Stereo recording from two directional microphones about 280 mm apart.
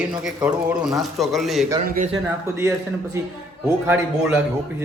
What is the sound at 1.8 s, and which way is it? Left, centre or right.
Speech, right.